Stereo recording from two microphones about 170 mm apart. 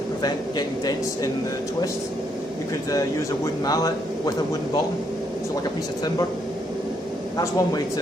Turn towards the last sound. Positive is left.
turn(degrees=20)  # may be behind; listen again after turning